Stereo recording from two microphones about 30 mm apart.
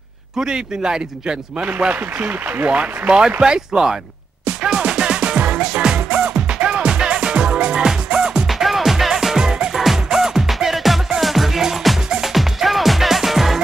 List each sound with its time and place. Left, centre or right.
0.4 s speech: right
1.6 s a man's voice: right
3.2 s speech: right
4.6 s music: right
8.5 s music: centre
10.7 s music: centre